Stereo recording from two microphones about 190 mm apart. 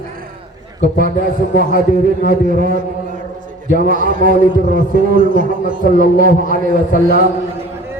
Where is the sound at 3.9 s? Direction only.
45° right (ahead or behind).